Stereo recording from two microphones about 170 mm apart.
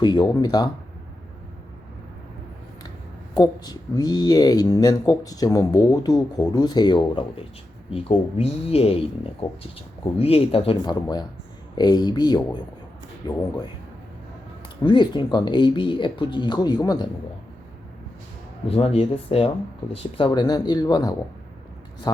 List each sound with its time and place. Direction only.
0.0 s speech: 25° left (ahead or behind)
3.3 s speech: 25° left (ahead or behind)
14.8 s speech: 25° left (ahead or behind)
18.7 s speech: 35° left (ahead or behind)